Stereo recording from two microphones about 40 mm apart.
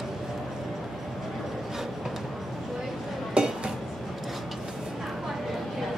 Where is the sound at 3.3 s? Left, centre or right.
Right.